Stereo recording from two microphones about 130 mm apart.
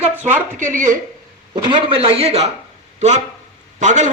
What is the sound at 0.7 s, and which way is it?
Speech, 80° right.